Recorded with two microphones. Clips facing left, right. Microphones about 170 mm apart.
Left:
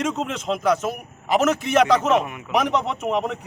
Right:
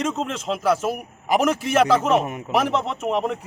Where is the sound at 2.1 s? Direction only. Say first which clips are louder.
Even; 40° right (ahead or behind).